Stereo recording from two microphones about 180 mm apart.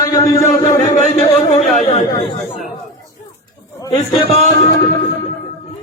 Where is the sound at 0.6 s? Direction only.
35° left (ahead or behind).